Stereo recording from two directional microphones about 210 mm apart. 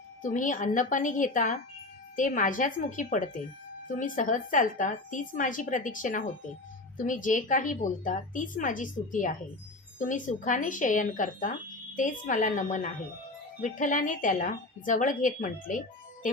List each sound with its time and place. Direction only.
0.2 s a woman's voice: 40° left (ahead or behind)